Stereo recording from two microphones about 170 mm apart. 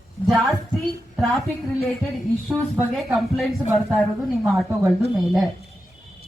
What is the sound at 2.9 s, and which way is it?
A woman's voice, centre (ahead or behind).